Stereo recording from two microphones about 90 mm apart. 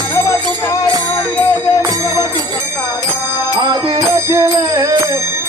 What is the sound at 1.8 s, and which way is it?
Music, 40° right (ahead or behind).